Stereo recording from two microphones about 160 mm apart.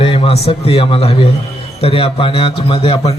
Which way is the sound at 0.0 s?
35° left (ahead or behind).